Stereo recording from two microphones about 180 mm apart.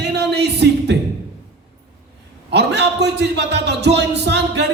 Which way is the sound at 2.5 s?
70° right (ahead or behind).